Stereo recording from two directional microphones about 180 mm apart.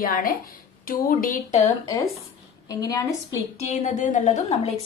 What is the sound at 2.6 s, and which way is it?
Speech, 20° left (ahead or behind).